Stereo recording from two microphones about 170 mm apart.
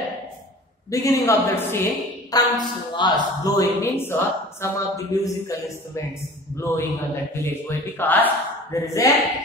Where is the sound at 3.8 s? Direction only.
15° left (ahead or behind).